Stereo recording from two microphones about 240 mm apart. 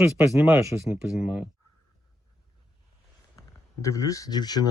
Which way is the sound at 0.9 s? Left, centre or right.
Centre.